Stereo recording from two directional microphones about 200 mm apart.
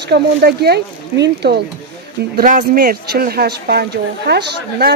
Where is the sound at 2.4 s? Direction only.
45° right (ahead or behind).